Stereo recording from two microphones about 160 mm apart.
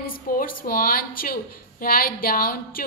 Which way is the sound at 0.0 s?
60° left (ahead or behind).